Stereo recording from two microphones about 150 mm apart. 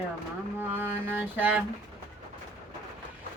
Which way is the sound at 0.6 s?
15° right (ahead or behind).